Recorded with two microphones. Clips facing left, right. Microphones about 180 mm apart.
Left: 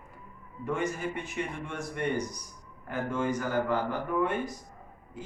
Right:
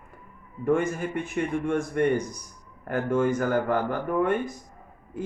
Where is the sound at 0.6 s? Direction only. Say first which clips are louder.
Right 7 dB; 50° right (ahead or behind).